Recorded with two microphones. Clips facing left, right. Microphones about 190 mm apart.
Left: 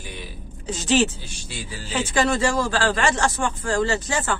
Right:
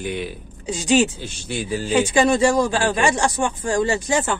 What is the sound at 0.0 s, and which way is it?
Speech, 60° right (ahead or behind).